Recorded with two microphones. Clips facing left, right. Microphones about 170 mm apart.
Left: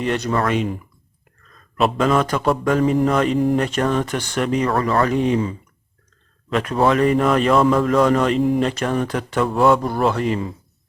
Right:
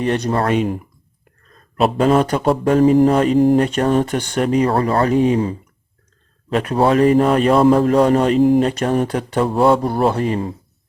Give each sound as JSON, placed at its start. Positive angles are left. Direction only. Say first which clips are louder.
{"t": 0.3, "sound": "a man's voice", "louder": "right 3 dB", "side_deg": -30}